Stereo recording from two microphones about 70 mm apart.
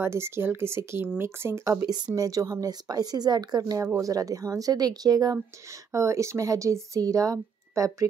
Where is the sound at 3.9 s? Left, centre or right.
Right.